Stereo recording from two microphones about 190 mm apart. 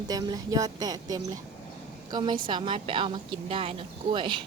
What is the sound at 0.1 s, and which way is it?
Speech, 20° right (ahead or behind).